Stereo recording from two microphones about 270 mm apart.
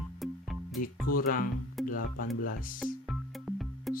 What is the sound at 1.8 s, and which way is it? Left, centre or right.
Music, centre.